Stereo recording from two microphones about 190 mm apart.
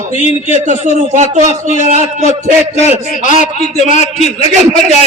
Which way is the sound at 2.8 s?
40° left (ahead or behind).